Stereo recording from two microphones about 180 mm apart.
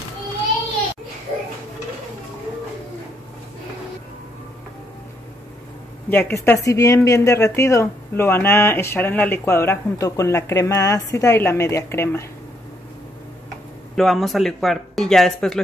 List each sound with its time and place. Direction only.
6.0 s speech: 10° left (ahead or behind)
13.9 s speech: centre (ahead or behind)